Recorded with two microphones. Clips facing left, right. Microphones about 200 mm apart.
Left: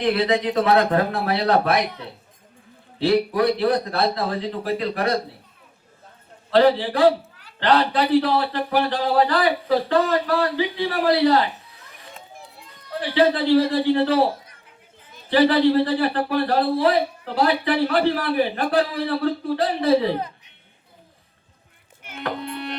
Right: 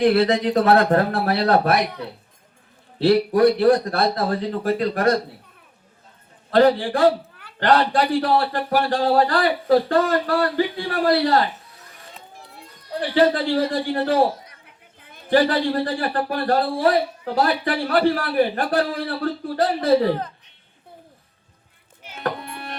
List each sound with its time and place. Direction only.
0.0 s a man's voice: 45° right (ahead or behind)
3.0 s a man's voice: 45° right (ahead or behind)
6.5 s a man's voice: 45° right (ahead or behind)
13.0 s a man's voice: 45° right (ahead or behind)
22.2 s music: 50° right (ahead or behind)